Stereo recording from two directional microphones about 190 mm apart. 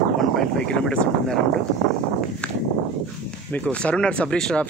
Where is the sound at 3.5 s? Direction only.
10° left (ahead or behind).